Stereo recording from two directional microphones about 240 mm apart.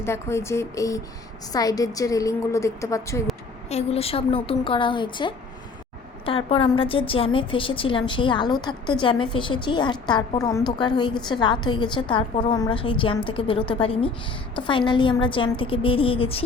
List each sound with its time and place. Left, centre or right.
0.0 s a woman's voice: centre
3.7 s a woman's voice: left